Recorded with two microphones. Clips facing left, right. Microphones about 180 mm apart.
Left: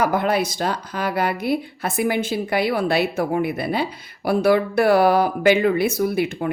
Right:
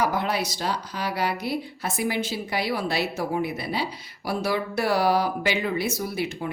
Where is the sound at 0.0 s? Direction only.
55° left (ahead or behind).